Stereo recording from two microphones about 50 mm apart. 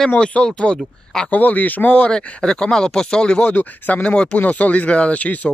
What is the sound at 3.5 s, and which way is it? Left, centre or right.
Speech, left.